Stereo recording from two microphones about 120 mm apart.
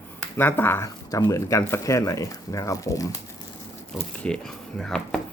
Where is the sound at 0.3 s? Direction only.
15° left (ahead or behind).